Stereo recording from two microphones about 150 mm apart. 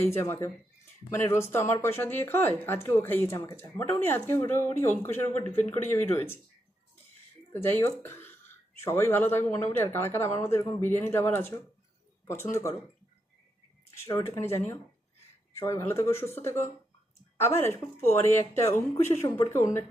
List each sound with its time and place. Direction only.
0.1 s speech: 15° left (ahead or behind)
7.5 s speech: 15° left (ahead or behind)
14.2 s speech: 15° left (ahead or behind)